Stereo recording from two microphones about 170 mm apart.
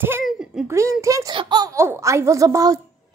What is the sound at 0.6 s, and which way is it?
A child's voice, 15° right (ahead or behind).